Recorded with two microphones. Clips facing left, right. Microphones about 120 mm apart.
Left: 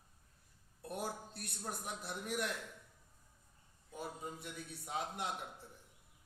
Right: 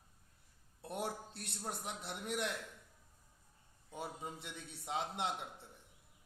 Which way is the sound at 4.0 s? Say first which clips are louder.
Even; 25° right (ahead or behind).